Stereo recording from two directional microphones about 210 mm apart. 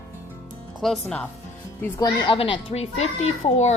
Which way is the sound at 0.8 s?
5° left (ahead or behind).